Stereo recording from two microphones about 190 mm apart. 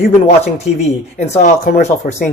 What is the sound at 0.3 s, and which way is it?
Speech, 35° left (ahead or behind).